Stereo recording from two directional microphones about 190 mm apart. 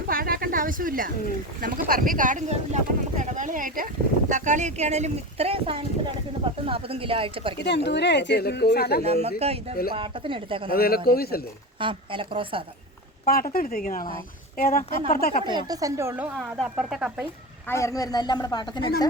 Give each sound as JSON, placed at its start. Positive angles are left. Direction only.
{"t": 0.1, "sound": "a sound", "side_deg": -50}
{"t": 1.9, "sound": "speech", "side_deg": -45}
{"t": 7.6, "sound": "speech", "side_deg": 65}
{"t": 9.0, "sound": "speech", "side_deg": -35}
{"t": 10.7, "sound": "speech", "side_deg": 50}
{"t": 11.8, "sound": "speech", "side_deg": -25}
{"t": 13.2, "sound": "speech", "side_deg": 50}
{"t": 15.4, "sound": "speech", "side_deg": -20}
{"t": 17.7, "sound": "a man's voice", "side_deg": 15}